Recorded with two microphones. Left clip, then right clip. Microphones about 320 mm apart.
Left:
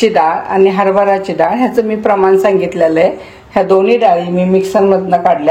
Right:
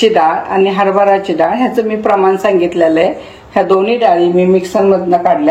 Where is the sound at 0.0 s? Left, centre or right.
Left.